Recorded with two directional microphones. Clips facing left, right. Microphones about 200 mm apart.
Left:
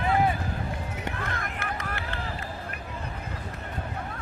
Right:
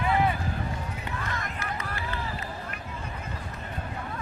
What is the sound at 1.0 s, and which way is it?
Run, 60° left (ahead or behind).